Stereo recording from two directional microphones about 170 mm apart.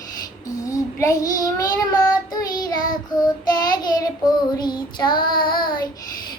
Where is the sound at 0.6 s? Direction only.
20° left (ahead or behind).